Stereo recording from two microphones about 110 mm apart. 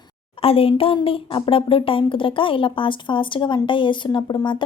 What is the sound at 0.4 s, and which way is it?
A woman's voice, 55° left (ahead or behind).